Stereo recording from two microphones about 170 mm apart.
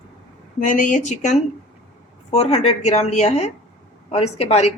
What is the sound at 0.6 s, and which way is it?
A woman's voice, 50° left (ahead or behind).